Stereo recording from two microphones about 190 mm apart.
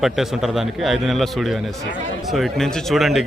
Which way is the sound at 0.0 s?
Centre (ahead or behind).